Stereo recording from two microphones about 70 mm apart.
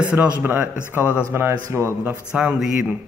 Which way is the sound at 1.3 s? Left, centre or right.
Right.